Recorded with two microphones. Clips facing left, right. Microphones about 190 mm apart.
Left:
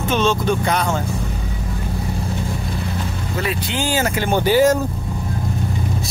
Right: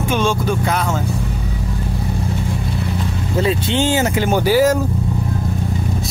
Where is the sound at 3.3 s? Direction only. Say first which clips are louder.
Right 6 dB; 25° right (ahead or behind).